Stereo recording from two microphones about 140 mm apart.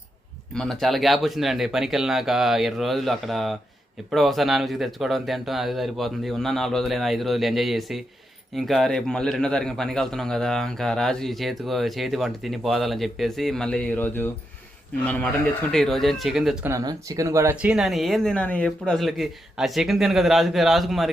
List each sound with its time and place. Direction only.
0.5 s a man's voice: centre (ahead or behind)
16.6 s speech: 20° right (ahead or behind)
17.7 s a man's voice: centre (ahead or behind)